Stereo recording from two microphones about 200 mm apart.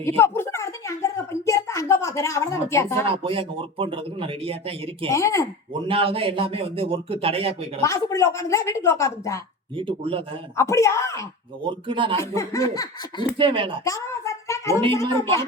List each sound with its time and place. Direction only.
0.0 s a sound: 10° left (ahead or behind)
3.1 s a man's voice: 25° right (ahead or behind)
5.0 s a woman's voice: 15° left (ahead or behind)
5.9 s a man's voice: 25° right (ahead or behind)
7.8 s a woman's voice: 15° left (ahead or behind)
9.7 s a man's voice: 25° right (ahead or behind)
10.6 s a woman's voice: 15° left (ahead or behind)
11.6 s a man's voice: 25° right (ahead or behind)
12.2 s a woman's voice: 15° left (ahead or behind)
13.4 s a man's voice: 25° right (ahead or behind)
13.8 s a sound: 15° left (ahead or behind)
14.9 s a woman's voice: 15° left (ahead or behind)